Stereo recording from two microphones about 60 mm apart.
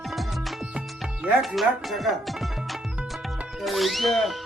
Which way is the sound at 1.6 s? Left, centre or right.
Centre.